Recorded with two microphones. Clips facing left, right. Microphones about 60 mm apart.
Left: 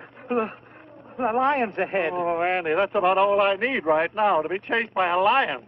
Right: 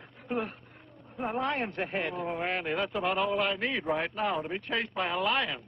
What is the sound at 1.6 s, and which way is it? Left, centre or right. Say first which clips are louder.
Speech: left 8 dB; left.